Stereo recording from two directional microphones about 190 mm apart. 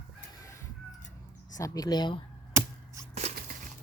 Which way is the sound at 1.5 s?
20° left (ahead or behind).